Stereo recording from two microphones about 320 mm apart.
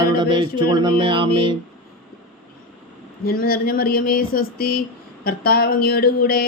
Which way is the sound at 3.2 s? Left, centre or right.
Left.